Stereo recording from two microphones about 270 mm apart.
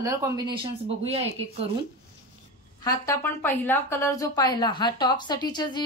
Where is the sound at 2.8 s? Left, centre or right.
Centre.